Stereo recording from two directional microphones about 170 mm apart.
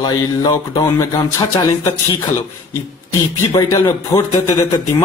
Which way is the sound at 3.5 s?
20° left (ahead or behind).